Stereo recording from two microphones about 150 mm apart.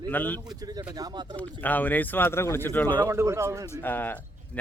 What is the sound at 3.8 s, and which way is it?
Speech, 15° left (ahead or behind).